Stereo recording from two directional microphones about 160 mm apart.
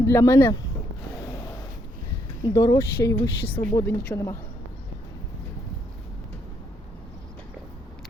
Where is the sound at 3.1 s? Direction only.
10° left (ahead or behind).